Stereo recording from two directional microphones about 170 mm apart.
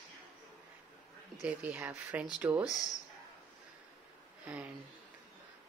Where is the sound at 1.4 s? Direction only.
10° right (ahead or behind).